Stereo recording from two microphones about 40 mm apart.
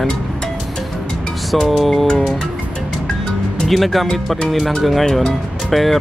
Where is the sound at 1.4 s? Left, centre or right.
Centre.